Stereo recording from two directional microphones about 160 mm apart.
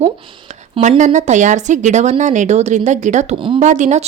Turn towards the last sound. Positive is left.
turn(degrees=-50)  # may be behind; listen again after turning